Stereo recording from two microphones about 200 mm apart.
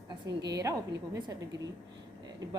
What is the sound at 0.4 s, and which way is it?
A woman's voice, 15° right (ahead or behind).